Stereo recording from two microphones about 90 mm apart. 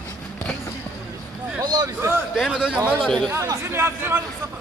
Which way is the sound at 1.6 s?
50° right (ahead or behind).